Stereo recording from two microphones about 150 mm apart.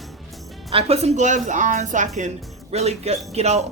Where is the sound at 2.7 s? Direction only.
45° right (ahead or behind).